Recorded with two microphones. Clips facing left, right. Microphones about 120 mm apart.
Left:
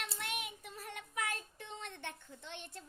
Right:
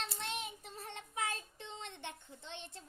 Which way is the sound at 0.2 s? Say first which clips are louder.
Right 1 dB; 30° right (ahead or behind).